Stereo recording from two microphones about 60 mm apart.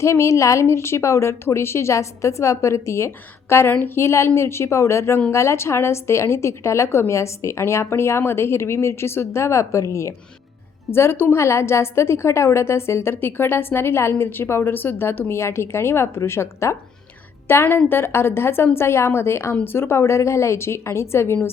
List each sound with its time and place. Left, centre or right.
0.0 s a woman's voice: left
3.7 s a woman's voice: left
3.9 s a woman's voice: left
10.9 s a woman's voice: left
15.4 s a woman's voice: left
17.5 s a woman's voice: left